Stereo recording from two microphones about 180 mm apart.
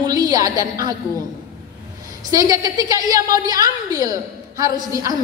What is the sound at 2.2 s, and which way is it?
A woman's voice, 20° right (ahead or behind).